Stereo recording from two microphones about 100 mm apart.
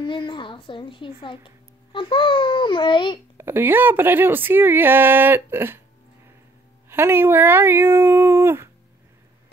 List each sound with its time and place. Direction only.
0.0 s speech: 55° left (ahead or behind)
3.3 s speech: 25° right (ahead or behind)
6.9 s speech: 25° right (ahead or behind)